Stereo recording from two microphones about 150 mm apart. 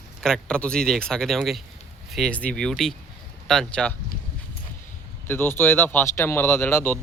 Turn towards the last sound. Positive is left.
turn(degrees=15)  # may be behind; listen again after turning